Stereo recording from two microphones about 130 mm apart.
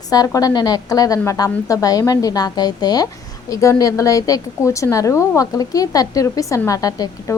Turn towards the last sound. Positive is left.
turn(degrees=25)  # may be behind; listen again after turning